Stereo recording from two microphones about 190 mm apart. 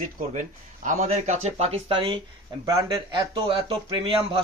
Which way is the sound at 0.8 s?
40° right (ahead or behind).